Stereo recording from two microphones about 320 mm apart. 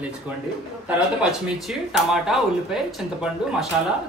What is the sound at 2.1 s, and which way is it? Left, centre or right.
A woman's voice, centre.